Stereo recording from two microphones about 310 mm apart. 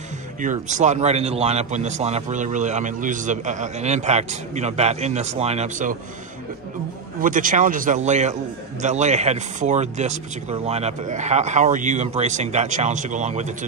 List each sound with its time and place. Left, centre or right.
0.4 s a man's voice: right
7.2 s a man's voice: right